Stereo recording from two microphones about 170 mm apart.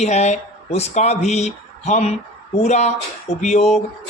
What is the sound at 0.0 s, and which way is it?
Speech, 40° left (ahead or behind).